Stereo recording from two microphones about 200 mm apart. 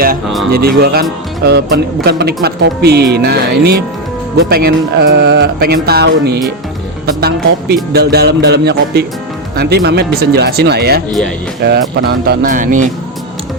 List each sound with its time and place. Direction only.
0.5 s music: 50° right (ahead or behind)